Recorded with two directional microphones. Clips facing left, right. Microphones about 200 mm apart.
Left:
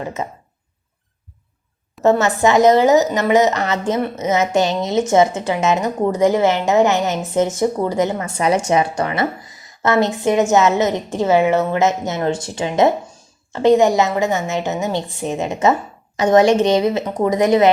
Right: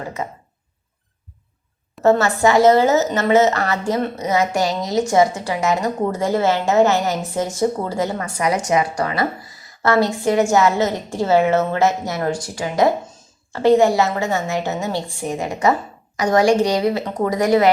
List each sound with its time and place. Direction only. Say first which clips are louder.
0.0 s a woman's voice: left 2 dB; 20° left (ahead or behind)
2.0 s a woman's voice: left 1 dB; 20° left (ahead or behind)